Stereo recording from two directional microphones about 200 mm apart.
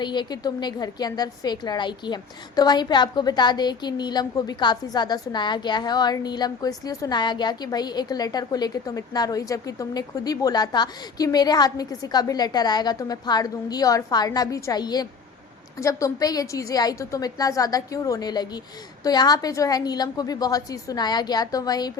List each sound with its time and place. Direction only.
0.0 s a woman's voice: 20° left (ahead or behind)